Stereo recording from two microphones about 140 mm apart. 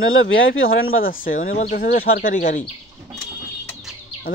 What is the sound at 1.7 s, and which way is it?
Speech, 90° left.